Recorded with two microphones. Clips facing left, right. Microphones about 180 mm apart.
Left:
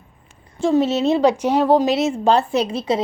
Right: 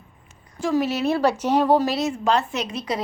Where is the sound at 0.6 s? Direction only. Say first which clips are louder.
Left 5 dB; 25° left (ahead or behind).